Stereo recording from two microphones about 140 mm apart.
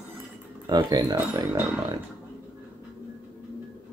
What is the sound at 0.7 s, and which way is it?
Speech, 30° right (ahead or behind).